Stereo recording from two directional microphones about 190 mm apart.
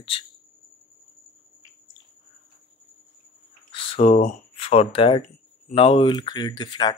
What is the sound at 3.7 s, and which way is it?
Speech, 30° left (ahead or behind).